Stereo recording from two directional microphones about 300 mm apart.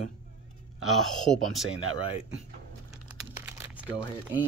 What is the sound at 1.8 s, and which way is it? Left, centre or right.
Speech, right.